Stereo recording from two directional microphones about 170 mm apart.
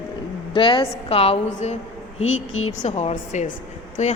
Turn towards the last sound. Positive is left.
turn(degrees=40)  # may be behind; listen again after turning